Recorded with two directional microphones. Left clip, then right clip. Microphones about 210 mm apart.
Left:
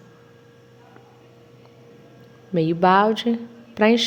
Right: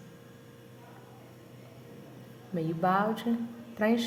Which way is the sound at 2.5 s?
40° left (ahead or behind).